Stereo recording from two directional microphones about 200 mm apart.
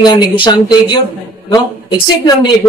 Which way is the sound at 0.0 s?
20° left (ahead or behind).